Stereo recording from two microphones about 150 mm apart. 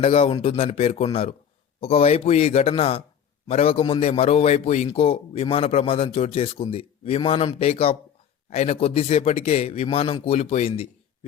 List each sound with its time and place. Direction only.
0.0 s a man's voice: 40° left (ahead or behind)